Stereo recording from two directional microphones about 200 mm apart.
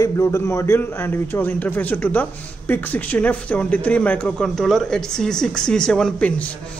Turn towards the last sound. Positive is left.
turn(degrees=5)  # may be behind; listen again after turning